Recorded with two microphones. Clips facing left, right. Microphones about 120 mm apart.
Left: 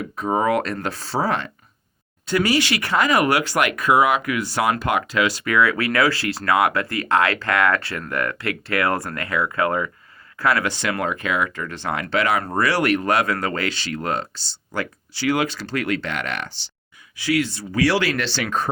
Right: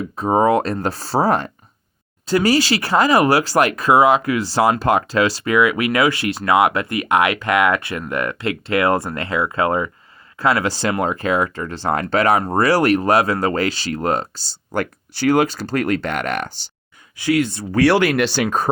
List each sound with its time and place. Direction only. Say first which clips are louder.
0.2 s speech: right 5 dB; 35° right (ahead or behind)
5.5 s speech: right 3 dB; 15° right (ahead or behind); by 16.6 s 45° right (ahead or behind)
17.6 s speech: right 5 dB; 60° right (ahead or behind)